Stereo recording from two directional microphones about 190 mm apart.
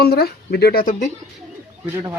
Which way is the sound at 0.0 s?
55° left (ahead or behind).